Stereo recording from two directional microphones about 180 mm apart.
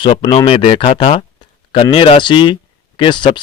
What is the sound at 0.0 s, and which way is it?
Speech, 30° left (ahead or behind).